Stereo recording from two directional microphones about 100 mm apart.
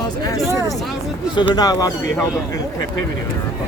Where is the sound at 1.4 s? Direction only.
45° left (ahead or behind).